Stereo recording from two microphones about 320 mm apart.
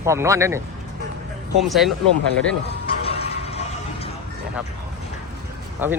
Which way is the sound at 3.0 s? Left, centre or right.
Centre.